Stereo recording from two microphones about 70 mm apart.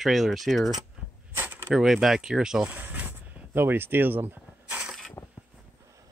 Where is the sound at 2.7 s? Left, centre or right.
Right.